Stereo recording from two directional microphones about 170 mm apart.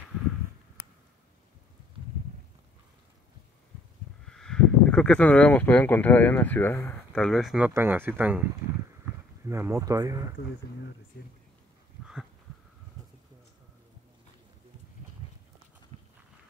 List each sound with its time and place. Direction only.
4.3 s speech: 5° left (ahead or behind)
7.2 s speech: centre (ahead or behind)
9.5 s speech: 15° right (ahead or behind)